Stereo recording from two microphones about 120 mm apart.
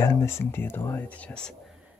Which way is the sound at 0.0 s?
25° left (ahead or behind).